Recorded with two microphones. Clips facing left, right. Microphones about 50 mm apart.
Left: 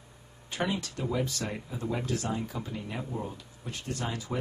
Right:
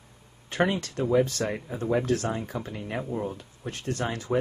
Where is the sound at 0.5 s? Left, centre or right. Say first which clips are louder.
Right 6 dB; right.